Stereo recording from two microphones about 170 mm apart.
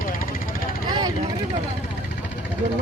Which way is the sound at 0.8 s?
25° right (ahead or behind).